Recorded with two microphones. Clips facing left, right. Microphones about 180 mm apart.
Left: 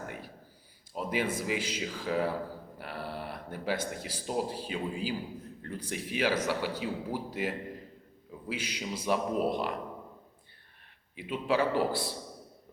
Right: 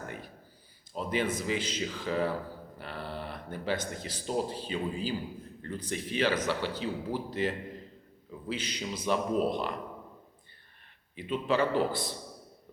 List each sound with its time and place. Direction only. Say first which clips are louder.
0.9 s speech: right 1 dB; 5° left (ahead or behind)
2.7 s a sound: even; 5° left (ahead or behind)
3.9 s a man's voice: right 1 dB; 5° left (ahead or behind)
11.1 s a man's voice: right 1 dB; 5° left (ahead or behind)